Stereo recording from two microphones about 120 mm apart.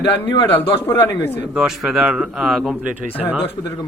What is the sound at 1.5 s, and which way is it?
Speech, 5° right (ahead or behind).